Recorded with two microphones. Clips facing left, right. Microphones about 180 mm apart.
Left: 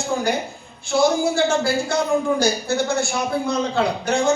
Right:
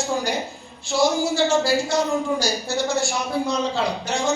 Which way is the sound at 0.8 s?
55° left (ahead or behind).